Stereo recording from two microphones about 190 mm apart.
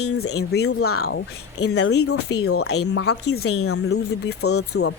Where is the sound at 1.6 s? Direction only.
65° left (ahead or behind).